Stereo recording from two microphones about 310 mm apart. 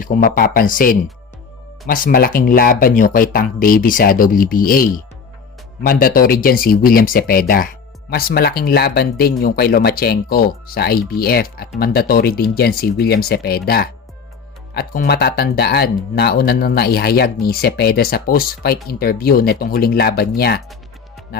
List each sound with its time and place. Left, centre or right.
0.0 s speech: left